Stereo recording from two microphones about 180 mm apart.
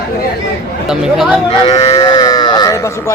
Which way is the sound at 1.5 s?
25° left (ahead or behind).